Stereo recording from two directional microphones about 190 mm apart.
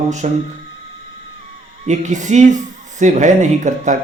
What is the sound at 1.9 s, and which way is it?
A man's voice, 40° right (ahead or behind).